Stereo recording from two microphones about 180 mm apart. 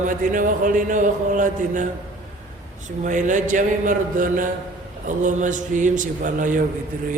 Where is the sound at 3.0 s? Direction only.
45° right (ahead or behind).